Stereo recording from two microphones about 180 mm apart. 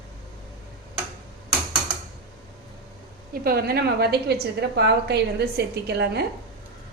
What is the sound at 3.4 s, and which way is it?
A woman's voice, 60° right (ahead or behind).